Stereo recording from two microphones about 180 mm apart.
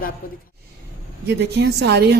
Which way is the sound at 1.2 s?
70° right (ahead or behind).